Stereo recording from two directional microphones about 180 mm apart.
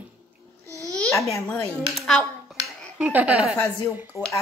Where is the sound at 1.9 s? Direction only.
Centre (ahead or behind).